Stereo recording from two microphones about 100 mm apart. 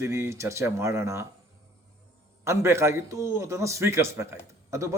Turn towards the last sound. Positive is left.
turn(degrees=-30)  # may be behind; listen again after turning